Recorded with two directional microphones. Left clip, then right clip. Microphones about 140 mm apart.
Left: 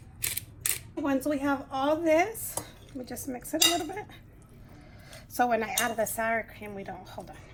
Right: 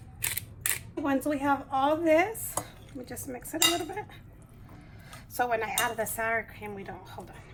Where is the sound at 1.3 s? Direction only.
30° left (ahead or behind).